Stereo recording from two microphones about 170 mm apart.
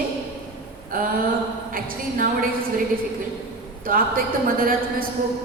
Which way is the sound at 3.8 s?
55° right (ahead or behind).